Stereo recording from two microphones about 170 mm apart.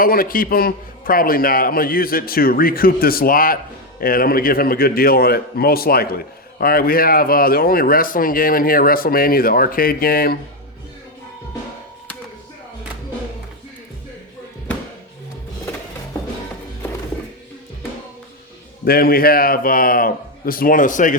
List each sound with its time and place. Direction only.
0.0 s a man's voice: 60° left (ahead or behind)
18.9 s a man's voice: 60° left (ahead or behind)